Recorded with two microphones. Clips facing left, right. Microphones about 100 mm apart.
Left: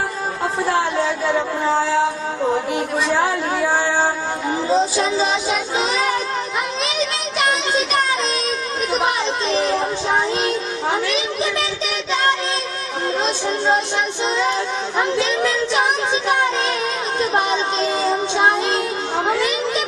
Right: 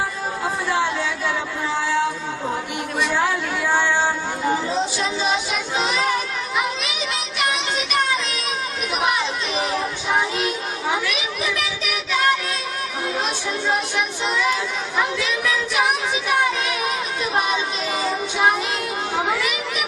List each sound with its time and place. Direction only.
0.6 s a sound: 40° left (ahead or behind)
4.7 s music: 35° left (ahead or behind)
7.3 s child singing: 35° left (ahead or behind)
9.5 s a sound: 5° right (ahead or behind)
9.7 s music: 30° left (ahead or behind)
13.2 s female singing: 30° left (ahead or behind)
14.9 s child singing: 30° left (ahead or behind)
17.2 s child singing: 30° left (ahead or behind)
19.4 s children playing: 30° left (ahead or behind)